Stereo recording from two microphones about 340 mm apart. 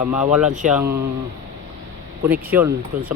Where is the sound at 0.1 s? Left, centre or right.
Centre.